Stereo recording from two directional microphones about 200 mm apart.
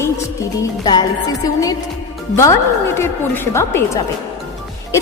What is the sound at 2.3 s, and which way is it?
A woman's voice, 15° left (ahead or behind).